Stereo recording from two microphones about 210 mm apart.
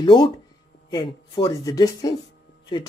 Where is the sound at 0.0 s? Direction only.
25° left (ahead or behind).